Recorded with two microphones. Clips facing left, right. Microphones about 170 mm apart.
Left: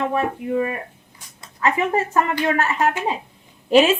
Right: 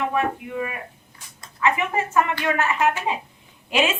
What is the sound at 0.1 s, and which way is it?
Speech, 35° left (ahead or behind).